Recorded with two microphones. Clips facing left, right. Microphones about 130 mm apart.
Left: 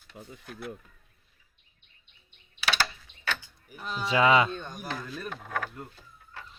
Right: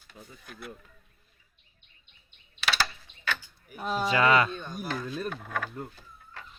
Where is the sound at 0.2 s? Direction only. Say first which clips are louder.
Left 4 dB; 30° left (ahead or behind).